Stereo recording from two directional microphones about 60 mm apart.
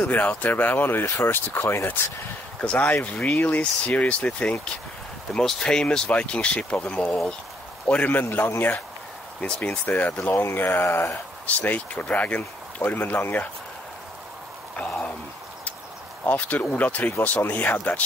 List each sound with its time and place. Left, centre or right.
0.0 s speech: left
2.6 s speech: left
10.4 s speech: left
11.4 s speech: left
16.3 s speech: left